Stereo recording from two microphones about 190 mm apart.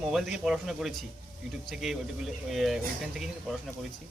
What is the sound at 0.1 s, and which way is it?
A man's voice, centre (ahead or behind).